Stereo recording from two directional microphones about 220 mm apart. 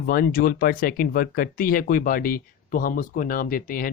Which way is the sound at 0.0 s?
40° left (ahead or behind).